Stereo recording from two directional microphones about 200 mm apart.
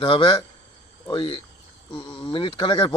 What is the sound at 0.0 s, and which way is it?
Speech, 25° left (ahead or behind).